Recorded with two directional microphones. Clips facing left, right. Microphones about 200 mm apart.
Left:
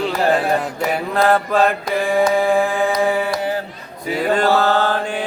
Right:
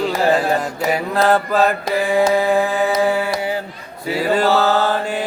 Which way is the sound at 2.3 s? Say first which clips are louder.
Even; 5° right (ahead or behind).